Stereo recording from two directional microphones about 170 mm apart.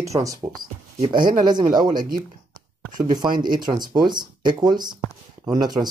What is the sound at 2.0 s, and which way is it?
Speech, 55° right (ahead or behind).